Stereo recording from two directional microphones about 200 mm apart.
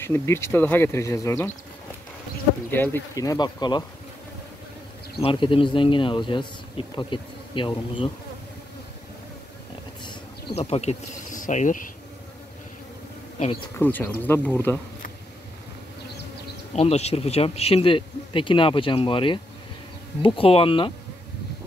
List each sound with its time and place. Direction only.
0.0 s speech: 10° left (ahead or behind)
2.7 s speech: 10° left (ahead or behind)
5.2 s speech: 25° left (ahead or behind)
10.5 s speech: 30° left (ahead or behind)
13.7 s speech: 10° left (ahead or behind)
16.7 s speech: 30° left (ahead or behind)